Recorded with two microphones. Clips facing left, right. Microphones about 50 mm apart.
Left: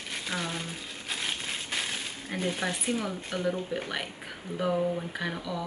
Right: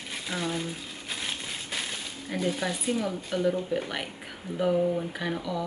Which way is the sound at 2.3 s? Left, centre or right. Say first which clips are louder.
Right 3 dB; left.